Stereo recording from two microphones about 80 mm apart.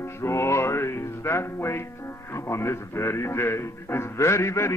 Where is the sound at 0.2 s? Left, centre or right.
Left.